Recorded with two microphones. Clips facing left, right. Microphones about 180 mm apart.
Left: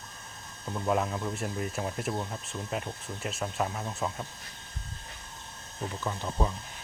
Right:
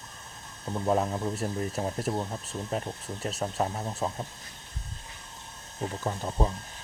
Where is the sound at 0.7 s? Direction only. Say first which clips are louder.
Right 2 dB; 30° right (ahead or behind).